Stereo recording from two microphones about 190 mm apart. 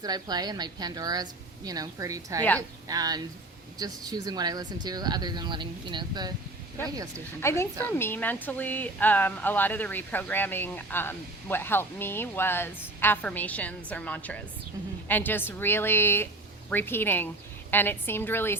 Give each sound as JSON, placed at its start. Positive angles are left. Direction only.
{"t": 0.0, "sound": "speech", "side_deg": -20}
{"t": 7.4, "sound": "a woman's voice", "side_deg": 15}